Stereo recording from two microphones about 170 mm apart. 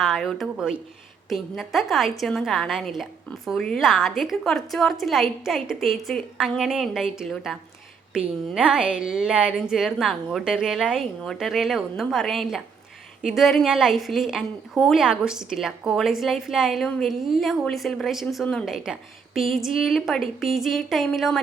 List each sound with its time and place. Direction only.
0.0 s a woman's voice: centre (ahead or behind)